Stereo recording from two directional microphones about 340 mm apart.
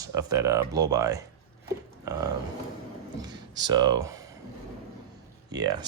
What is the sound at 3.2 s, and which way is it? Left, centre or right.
Speech, centre.